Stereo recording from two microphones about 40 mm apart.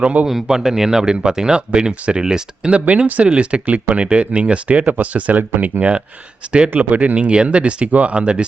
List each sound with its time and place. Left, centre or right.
0.0 s speech: right
0.4 s speech: centre; by 4.9 s right
4.9 s speech: right